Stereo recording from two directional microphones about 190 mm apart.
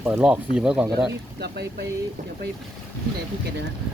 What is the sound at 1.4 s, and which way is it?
Speech, 60° right (ahead or behind).